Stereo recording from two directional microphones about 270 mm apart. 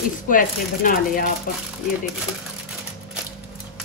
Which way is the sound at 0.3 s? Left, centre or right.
Left.